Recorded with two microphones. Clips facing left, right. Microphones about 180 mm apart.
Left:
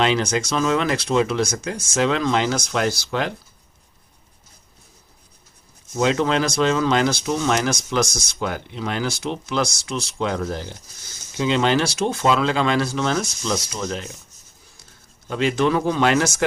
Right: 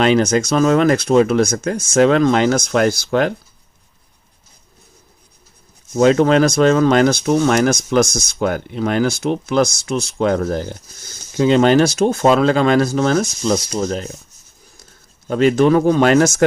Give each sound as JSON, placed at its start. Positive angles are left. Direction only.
{"t": 0.0, "sound": "speech", "side_deg": -45}
{"t": 6.0, "sound": "speech", "side_deg": -50}
{"t": 15.3, "sound": "speech", "side_deg": -45}